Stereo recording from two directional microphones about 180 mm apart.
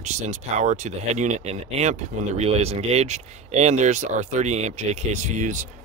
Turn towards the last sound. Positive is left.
turn(degrees=-45)  # may be behind; listen again after turning